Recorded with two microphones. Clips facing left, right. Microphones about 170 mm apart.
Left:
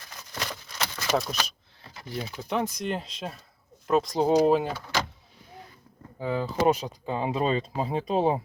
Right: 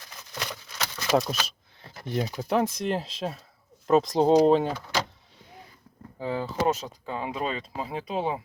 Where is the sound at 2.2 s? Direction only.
40° right (ahead or behind).